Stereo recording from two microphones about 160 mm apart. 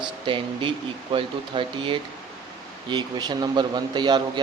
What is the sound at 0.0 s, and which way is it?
A man's voice, 30° right (ahead or behind).